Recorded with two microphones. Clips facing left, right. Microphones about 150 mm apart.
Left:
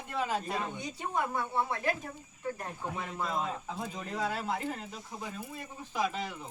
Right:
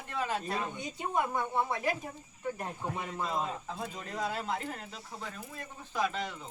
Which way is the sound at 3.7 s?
10° left (ahead or behind).